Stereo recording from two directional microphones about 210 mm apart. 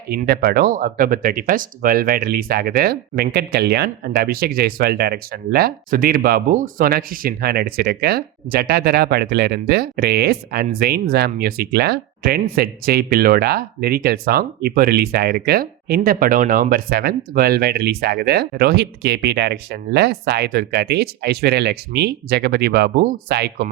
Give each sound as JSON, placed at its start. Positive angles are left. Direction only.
{"t": 0.1, "sound": "speech", "side_deg": -50}